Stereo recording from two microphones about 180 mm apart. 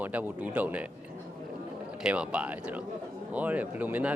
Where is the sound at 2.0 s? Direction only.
5° right (ahead or behind).